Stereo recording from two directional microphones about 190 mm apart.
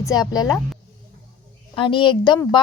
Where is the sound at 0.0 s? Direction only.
20° left (ahead or behind).